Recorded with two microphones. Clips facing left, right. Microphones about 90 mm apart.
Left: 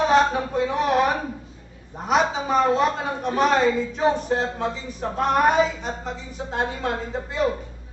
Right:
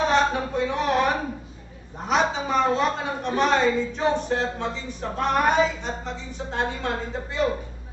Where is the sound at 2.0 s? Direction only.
5° left (ahead or behind).